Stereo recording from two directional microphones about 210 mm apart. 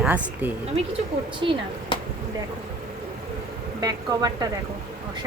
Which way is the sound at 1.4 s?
25° right (ahead or behind).